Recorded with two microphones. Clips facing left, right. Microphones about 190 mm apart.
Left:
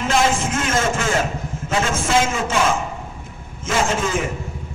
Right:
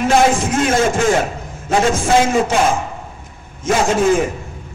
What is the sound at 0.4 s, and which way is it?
A man's voice, 35° right (ahead or behind).